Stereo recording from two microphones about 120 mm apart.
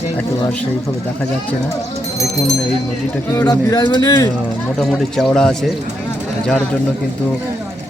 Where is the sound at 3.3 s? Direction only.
30° left (ahead or behind).